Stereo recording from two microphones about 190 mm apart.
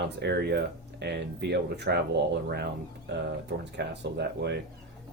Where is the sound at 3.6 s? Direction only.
60° right (ahead or behind).